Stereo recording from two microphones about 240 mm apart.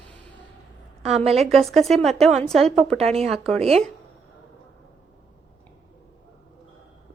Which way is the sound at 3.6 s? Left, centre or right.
Right.